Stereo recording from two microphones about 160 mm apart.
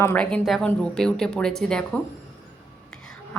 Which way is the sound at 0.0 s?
10° left (ahead or behind).